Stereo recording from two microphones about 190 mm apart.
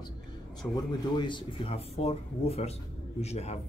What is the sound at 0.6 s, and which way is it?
Speech, 15° left (ahead or behind).